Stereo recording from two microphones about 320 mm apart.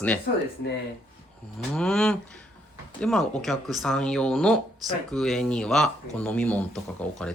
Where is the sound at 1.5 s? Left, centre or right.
Centre.